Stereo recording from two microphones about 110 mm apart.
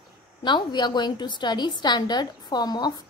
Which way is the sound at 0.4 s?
45° left (ahead or behind).